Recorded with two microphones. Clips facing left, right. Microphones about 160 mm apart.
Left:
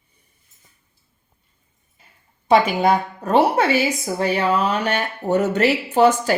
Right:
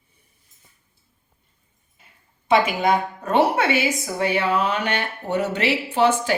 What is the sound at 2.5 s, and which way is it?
A woman's voice, 35° left (ahead or behind).